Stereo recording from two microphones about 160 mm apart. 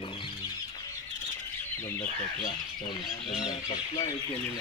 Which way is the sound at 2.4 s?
25° left (ahead or behind).